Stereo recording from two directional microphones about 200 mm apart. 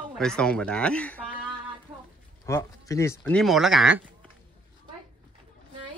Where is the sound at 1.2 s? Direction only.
5° right (ahead or behind).